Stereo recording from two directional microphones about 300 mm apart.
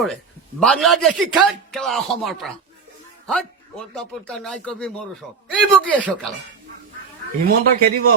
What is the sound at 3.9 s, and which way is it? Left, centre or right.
Speech, centre.